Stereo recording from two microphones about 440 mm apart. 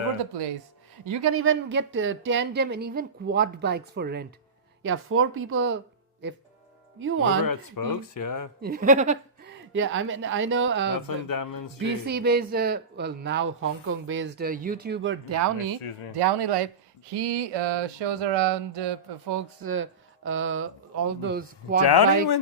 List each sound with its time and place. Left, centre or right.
1.0 s speech: right
7.0 s speech: right
7.4 s speech: left
8.6 s speech: centre
11.0 s speech: left
12.0 s speech: right
16.1 s speech: right
19.6 s speech: right
21.8 s speech: left